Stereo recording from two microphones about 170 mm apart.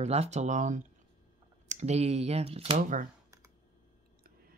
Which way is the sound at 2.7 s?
50° right (ahead or behind).